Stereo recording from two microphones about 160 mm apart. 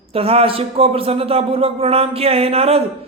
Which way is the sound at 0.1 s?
35° right (ahead or behind).